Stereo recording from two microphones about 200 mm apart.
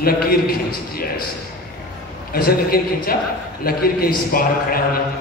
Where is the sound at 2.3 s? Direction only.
50° left (ahead or behind).